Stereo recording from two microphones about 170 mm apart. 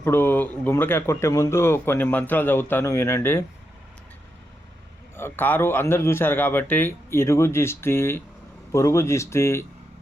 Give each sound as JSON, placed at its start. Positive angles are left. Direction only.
{"t": 0.0, "sound": "speech", "side_deg": 15}
{"t": 5.1, "sound": "speech", "side_deg": 10}